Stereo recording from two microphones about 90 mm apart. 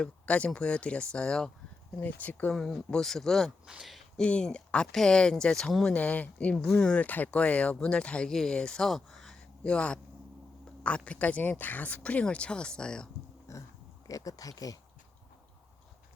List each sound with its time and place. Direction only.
0.0 s speech: 15° left (ahead or behind)
2.5 s speech: 5° left (ahead or behind)
4.2 s speech: 10° left (ahead or behind)
13.5 s a sound: 35° left (ahead or behind)
14.1 s speech: 40° left (ahead or behind)